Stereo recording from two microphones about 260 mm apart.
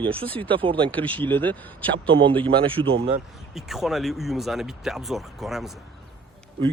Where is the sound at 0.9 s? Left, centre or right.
Centre.